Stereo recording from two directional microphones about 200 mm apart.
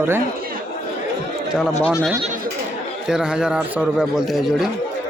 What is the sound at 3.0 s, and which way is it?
A man's voice, 5° right (ahead or behind).